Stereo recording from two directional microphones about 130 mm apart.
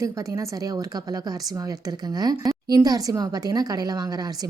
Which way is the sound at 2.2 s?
30° right (ahead or behind).